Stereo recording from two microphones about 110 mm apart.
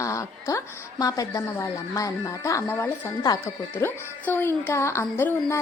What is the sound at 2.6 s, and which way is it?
Speech, 15° left (ahead or behind).